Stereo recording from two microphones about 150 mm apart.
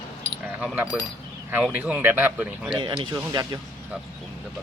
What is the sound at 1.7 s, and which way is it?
Speech, 10° right (ahead or behind).